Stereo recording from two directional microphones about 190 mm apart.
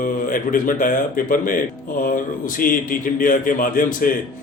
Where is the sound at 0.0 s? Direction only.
45° left (ahead or behind).